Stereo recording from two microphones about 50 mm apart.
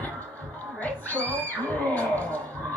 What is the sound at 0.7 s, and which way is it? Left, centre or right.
Music, left.